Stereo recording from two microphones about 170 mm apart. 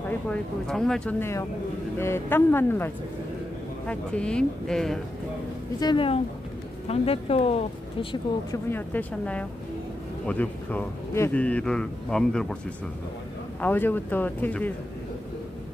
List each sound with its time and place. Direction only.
0.3 s speech: 5° left (ahead or behind)
2.0 s speech: 15° left (ahead or behind)
5.8 s speech: 30° left (ahead or behind)
8.6 s speech: 10° left (ahead or behind)
13.6 s speech: 10° left (ahead or behind)